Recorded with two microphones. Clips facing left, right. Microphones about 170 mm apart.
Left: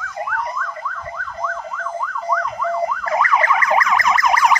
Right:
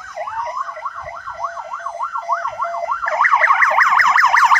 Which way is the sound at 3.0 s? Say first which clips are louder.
Right 1 dB; 15° left (ahead or behind).